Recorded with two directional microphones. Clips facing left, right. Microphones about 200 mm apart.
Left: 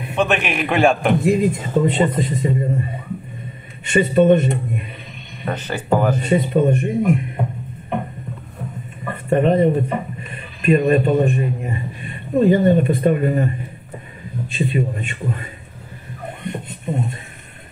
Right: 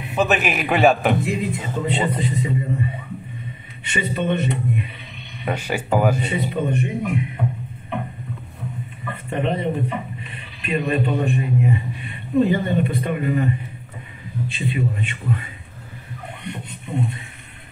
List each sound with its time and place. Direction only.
0.1 s a man's voice: 5° right (ahead or behind)
1.2 s speech: 45° left (ahead or behind)
3.8 s speech: 45° left (ahead or behind)
5.4 s speech: 10° right (ahead or behind)
6.2 s speech: 45° left (ahead or behind)
9.0 s speech: 45° left (ahead or behind)
14.5 s speech: 45° left (ahead or behind)
16.3 s a sound: 45° left (ahead or behind)